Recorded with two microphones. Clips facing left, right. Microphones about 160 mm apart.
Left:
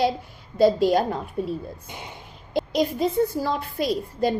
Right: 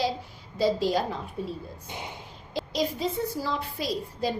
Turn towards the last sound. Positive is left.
turn(degrees=55)  # may be behind; listen again after turning